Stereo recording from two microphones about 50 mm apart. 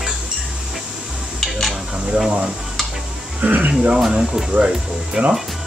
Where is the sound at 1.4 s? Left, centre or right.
Centre.